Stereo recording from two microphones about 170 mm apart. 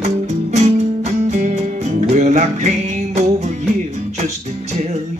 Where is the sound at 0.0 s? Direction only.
40° right (ahead or behind).